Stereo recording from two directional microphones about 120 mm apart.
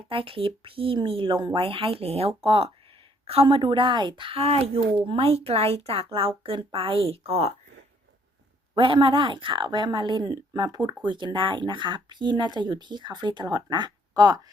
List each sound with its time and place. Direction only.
0.1 s speech: 50° right (ahead or behind)
8.7 s speech: 45° right (ahead or behind)